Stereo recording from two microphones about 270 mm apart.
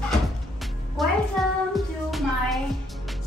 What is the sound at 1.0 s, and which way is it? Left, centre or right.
Music, centre.